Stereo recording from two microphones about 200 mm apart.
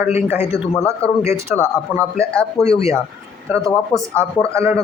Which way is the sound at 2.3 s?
5° left (ahead or behind).